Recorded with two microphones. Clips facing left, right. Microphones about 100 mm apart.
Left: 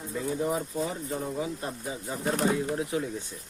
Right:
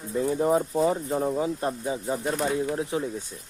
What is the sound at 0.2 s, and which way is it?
Speech, 40° right (ahead or behind).